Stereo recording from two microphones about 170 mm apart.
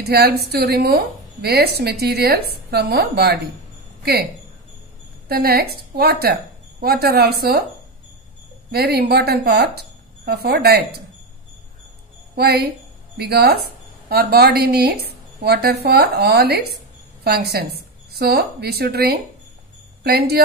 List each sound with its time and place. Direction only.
0.0 s a woman's voice: 70° right (ahead or behind)
5.3 s a woman's voice: 65° right (ahead or behind)
8.7 s a woman's voice: 70° right (ahead or behind)
12.4 s a woman's voice: 70° right (ahead or behind)